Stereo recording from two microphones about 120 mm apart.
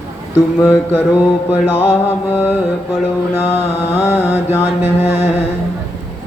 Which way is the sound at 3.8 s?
20° left (ahead or behind).